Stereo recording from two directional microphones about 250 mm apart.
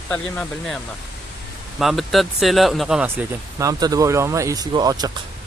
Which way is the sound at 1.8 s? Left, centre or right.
Centre.